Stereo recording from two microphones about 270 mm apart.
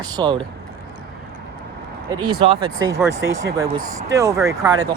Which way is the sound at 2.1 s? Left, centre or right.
Centre.